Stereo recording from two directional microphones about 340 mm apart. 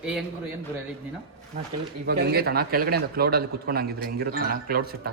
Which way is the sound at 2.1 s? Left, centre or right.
Right.